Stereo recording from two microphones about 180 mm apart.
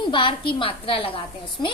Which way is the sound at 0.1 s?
30° left (ahead or behind).